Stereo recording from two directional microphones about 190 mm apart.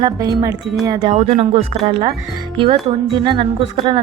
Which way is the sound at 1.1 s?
35° right (ahead or behind).